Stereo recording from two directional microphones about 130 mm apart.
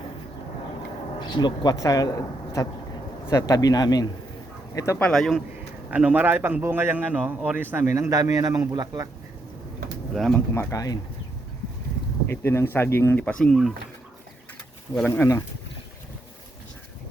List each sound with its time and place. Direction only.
1.2 s speech: 35° left (ahead or behind)
4.9 s speech: 5° left (ahead or behind)
5.9 s a man's voice: 10° right (ahead or behind); by 9.0 s 30° right (ahead or behind)
10.2 s speech: centre (ahead or behind)
10.5 s speech: 20° left (ahead or behind)
12.3 s speech: 20° left (ahead or behind)
13.2 s speech: 5° left (ahead or behind)
15.0 s speech: 20° left (ahead or behind)